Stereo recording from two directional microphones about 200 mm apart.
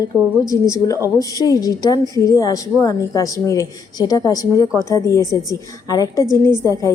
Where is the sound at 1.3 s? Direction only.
20° left (ahead or behind).